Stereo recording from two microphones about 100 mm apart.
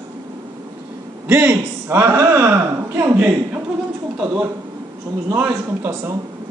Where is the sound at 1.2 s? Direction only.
15° right (ahead or behind).